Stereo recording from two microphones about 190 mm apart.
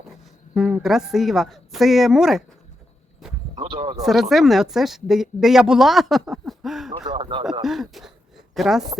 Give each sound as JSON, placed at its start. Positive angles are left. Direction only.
{"t": 0.5, "sound": "a woman's voice", "side_deg": -5}
{"t": 3.5, "sound": "speech", "side_deg": -25}
{"t": 4.0, "sound": "a woman's voice", "side_deg": 0}
{"t": 7.0, "sound": "speech", "side_deg": -25}
{"t": 7.6, "sound": "a woman's voice", "side_deg": 0}